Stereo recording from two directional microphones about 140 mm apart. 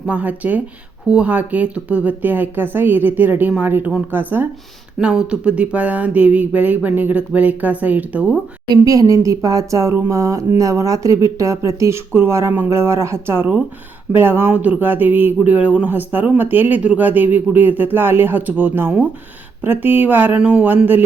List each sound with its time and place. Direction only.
0.0 s speech: 10° right (ahead or behind)
8.7 s speech: 25° right (ahead or behind)